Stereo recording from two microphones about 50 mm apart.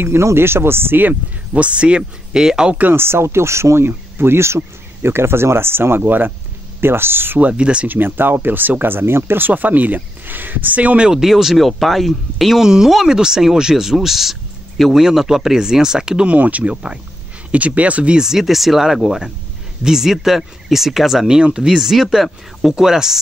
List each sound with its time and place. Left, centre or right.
0.0 s speech: right
1.5 s speech: right
2.9 s speech: right
6.8 s speech: right
7.3 s speech: right
7.9 s speech: right
9.5 s speech: right
11.1 s speech: centre
12.6 s speech: centre
16.3 s speech: right
18.2 s speech: centre